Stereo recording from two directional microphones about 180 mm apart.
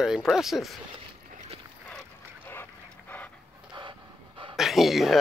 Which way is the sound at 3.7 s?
25° right (ahead or behind).